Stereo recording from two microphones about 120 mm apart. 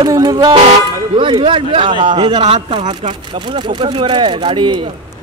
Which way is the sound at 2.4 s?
55° right (ahead or behind).